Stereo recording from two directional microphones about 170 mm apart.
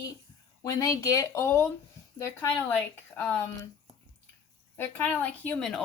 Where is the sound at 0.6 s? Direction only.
20° left (ahead or behind).